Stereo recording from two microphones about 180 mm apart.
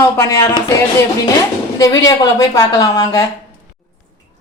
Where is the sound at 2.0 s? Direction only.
20° left (ahead or behind).